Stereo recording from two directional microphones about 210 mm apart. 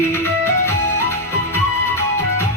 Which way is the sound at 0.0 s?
10° left (ahead or behind).